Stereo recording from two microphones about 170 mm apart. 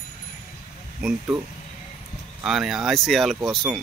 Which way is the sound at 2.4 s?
Centre (ahead or behind).